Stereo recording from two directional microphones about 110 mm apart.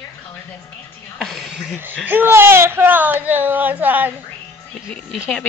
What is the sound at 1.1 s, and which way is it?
Music, centre (ahead or behind).